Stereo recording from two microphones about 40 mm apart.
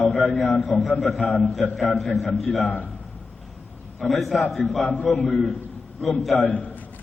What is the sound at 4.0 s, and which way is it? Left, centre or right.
A man's voice, centre.